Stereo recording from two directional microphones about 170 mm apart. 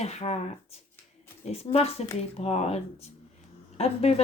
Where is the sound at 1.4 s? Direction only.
40° left (ahead or behind).